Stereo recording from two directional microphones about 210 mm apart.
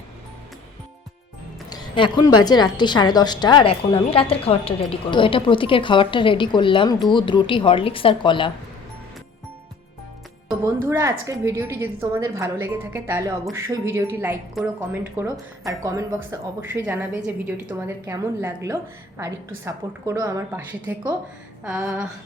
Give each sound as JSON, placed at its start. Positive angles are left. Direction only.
{"t": 1.7, "sound": "music", "side_deg": 20}
{"t": 2.4, "sound": "speech", "side_deg": 20}
{"t": 10.8, "sound": "speech", "side_deg": -15}
{"t": 21.6, "sound": "a sound", "side_deg": -5}